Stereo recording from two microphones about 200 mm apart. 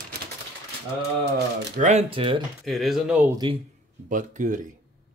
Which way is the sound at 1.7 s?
35° right (ahead or behind).